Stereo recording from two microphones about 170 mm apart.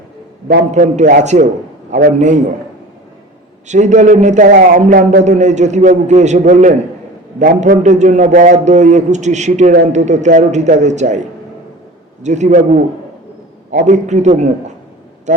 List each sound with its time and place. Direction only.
0.4 s a man's voice: 45° right (ahead or behind)
3.7 s a man's voice: 45° right (ahead or behind)